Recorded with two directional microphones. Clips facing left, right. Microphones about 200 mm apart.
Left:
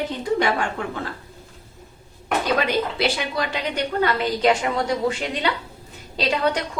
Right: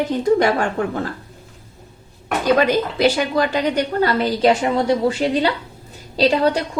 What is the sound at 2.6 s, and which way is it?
A woman's voice, 45° right (ahead or behind).